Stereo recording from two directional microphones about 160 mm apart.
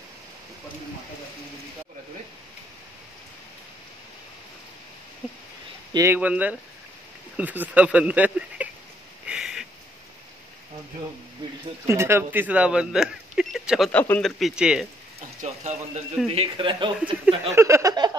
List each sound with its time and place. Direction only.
5.9 s speech: 15° right (ahead or behind)
9.2 s a sound: 5° right (ahead or behind)
11.9 s speech: 15° right (ahead or behind); by 14.3 s 10° left (ahead or behind)
14.4 s speech: 5° right (ahead or behind)
15.1 s a sound: 45° right (ahead or behind)
16.3 s speech: 35° right (ahead or behind)
17.0 s speech: 20° right (ahead or behind)